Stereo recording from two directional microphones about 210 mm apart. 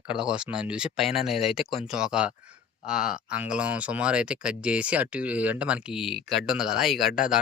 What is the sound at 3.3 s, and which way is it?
Speech, 5° right (ahead or behind).